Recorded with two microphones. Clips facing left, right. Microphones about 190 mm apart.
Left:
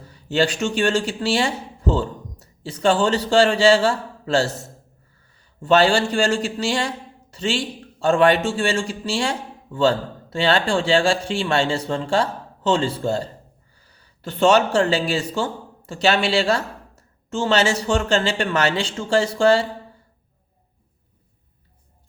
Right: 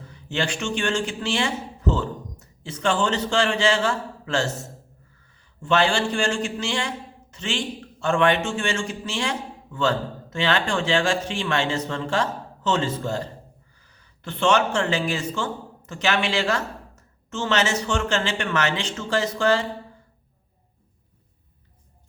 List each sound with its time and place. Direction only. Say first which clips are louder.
0.1 s speech: left 7 dB; 35° left (ahead or behind)
5.6 s a man's voice: left 5 dB; 35° left (ahead or behind)